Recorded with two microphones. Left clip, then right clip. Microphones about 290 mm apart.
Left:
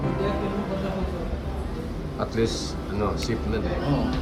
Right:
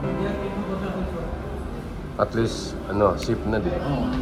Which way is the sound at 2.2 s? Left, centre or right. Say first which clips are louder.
Right 3 dB; centre.